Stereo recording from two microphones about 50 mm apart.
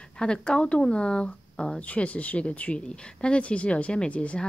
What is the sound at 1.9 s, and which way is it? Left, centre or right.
A woman's voice, left.